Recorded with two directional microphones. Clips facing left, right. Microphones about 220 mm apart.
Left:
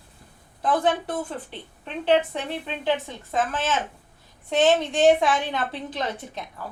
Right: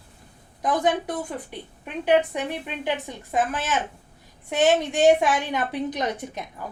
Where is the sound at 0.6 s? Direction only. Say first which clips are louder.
Even; 15° right (ahead or behind).